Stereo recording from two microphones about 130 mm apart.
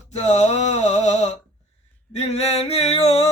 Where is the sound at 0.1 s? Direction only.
60° left (ahead or behind).